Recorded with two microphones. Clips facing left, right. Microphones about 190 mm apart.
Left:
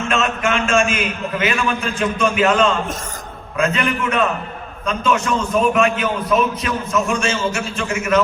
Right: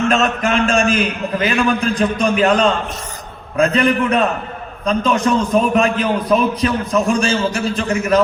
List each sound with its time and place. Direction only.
0.1 s a man's voice: 35° right (ahead or behind)